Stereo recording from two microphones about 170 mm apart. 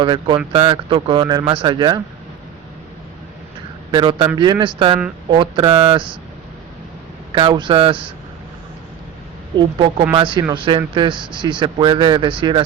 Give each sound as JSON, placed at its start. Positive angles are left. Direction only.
{"t": 0.0, "sound": "speech", "side_deg": -30}
{"t": 3.9, "sound": "speech", "side_deg": -25}
{"t": 7.3, "sound": "speech", "side_deg": -25}
{"t": 9.6, "sound": "speech", "side_deg": -25}